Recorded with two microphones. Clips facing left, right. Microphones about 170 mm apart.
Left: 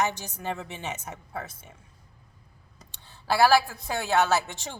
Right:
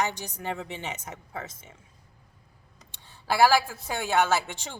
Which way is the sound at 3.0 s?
15° right (ahead or behind).